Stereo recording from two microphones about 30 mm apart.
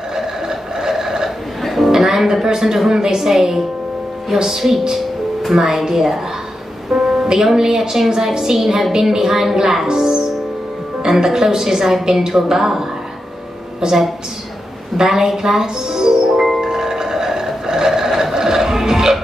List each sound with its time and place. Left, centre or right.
0.1 s vehicle: centre
1.6 s music: centre
2.1 s speech: centre
2.4 s a woman's voice: centre
3.2 s speech: centre
4.5 s speech: centre
9.8 s a woman's voice: right
13.8 s a woman's voice: right
15.0 s speech: centre
16.6 s music: centre